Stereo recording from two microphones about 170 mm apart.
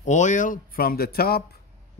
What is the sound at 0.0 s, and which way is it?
A man's voice, 45° left (ahead or behind).